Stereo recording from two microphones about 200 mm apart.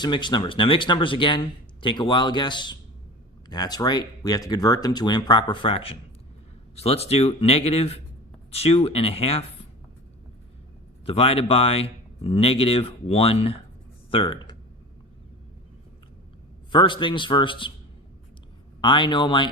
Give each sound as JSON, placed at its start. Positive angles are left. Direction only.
{"t": 0.0, "sound": "speech", "side_deg": 20}
{"t": 11.0, "sound": "speech", "side_deg": 30}
{"t": 16.7, "sound": "speech", "side_deg": 25}
{"t": 18.8, "sound": "speech", "side_deg": 25}